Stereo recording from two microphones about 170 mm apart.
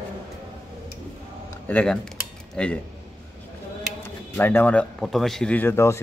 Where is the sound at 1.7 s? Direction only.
10° left (ahead or behind).